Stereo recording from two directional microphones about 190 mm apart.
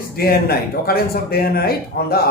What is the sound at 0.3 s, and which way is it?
Speech, 55° left (ahead or behind).